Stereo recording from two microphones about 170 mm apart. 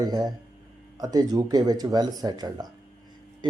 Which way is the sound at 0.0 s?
25° right (ahead or behind).